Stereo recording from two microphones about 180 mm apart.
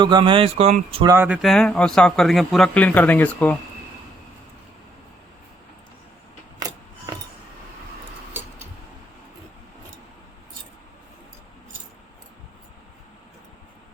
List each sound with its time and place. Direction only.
0.0 s speech: 25° right (ahead or behind)
1.0 s speech: 15° right (ahead or behind)
1.4 s speech: centre (ahead or behind)